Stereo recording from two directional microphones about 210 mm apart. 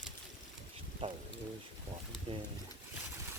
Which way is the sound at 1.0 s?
25° right (ahead or behind).